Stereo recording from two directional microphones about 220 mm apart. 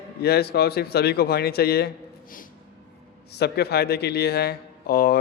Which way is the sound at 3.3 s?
50° left (ahead or behind).